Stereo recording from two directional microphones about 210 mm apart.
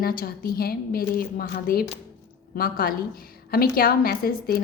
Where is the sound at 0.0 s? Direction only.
45° left (ahead or behind).